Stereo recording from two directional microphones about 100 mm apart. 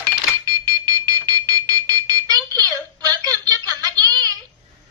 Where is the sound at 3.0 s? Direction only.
40° right (ahead or behind).